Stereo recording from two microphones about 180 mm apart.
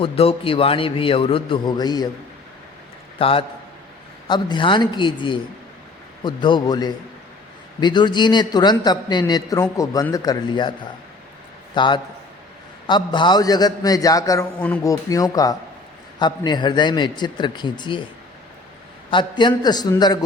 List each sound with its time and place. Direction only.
0.0 s a man's voice: 30° left (ahead or behind)
3.2 s a man's voice: 30° left (ahead or behind)
19.1 s a man's voice: 25° left (ahead or behind)